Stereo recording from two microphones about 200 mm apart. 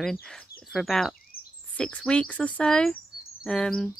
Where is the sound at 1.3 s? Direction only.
45° left (ahead or behind).